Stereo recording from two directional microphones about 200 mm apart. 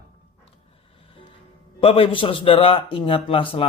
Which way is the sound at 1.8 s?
30° left (ahead or behind).